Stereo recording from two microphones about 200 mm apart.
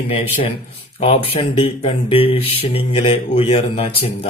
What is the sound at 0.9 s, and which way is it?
Speech, 30° left (ahead or behind).